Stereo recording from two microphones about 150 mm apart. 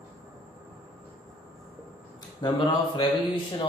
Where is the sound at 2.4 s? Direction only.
30° left (ahead or behind).